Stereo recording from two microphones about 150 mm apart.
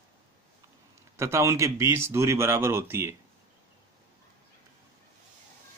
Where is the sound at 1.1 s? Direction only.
20° right (ahead or behind).